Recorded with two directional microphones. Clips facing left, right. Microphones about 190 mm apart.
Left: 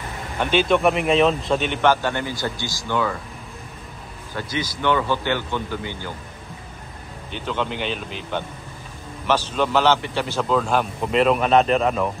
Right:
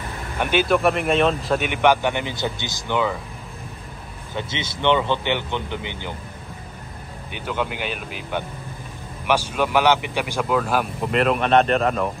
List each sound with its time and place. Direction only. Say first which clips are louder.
0.4 s speech: left 1 dB; 10° right (ahead or behind)
4.4 s speech: left 1 dB; 25° right (ahead or behind)
7.3 s a man's voice: left 1 dB; 10° right (ahead or behind)